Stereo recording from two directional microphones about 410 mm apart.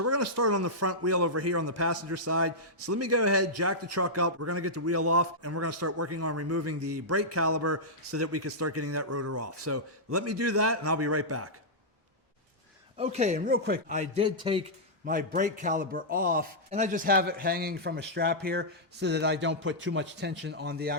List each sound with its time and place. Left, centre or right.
0.0 s speech: right
13.0 s a man's voice: centre